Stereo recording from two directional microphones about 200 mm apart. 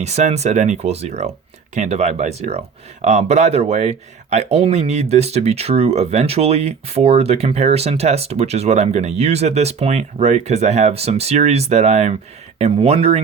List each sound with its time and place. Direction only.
0.0 s speech: 35° right (ahead or behind)